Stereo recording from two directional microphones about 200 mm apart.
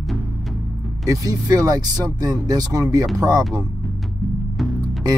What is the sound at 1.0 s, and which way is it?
Speech, 15° right (ahead or behind).